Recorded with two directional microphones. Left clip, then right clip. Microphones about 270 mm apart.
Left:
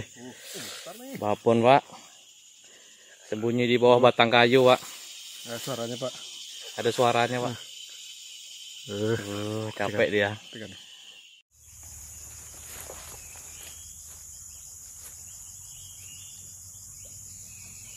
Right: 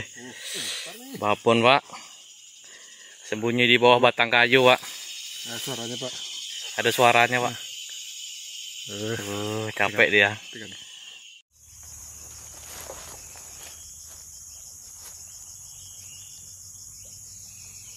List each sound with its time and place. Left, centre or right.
0.0 s speech: centre
3.3 s speech: centre
6.7 s speech: centre
8.8 s speech: left
9.3 s speech: centre